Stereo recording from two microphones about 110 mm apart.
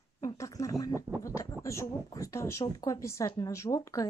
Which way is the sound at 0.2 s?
30° left (ahead or behind).